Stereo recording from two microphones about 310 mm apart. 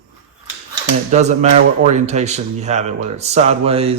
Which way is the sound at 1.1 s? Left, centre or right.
Right.